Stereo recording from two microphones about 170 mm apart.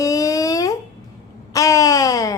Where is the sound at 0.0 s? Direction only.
20° left (ahead or behind).